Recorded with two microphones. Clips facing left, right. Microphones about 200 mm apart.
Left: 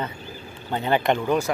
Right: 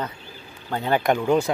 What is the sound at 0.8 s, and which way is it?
Speech, 5° right (ahead or behind).